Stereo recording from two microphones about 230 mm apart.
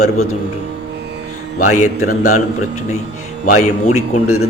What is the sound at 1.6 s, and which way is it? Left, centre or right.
Speech, left.